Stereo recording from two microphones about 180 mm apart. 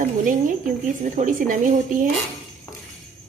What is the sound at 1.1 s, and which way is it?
Speech, 45° right (ahead or behind).